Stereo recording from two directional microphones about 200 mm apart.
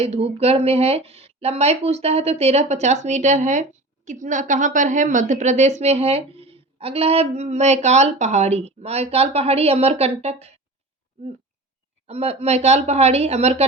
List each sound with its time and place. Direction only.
0.0 s a woman's voice: 30° right (ahead or behind)
12.0 s a woman's voice: 30° right (ahead or behind)